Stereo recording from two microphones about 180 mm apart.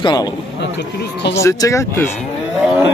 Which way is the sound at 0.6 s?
75° left (ahead or behind).